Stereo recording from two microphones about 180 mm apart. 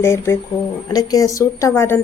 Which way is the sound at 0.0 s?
15° left (ahead or behind).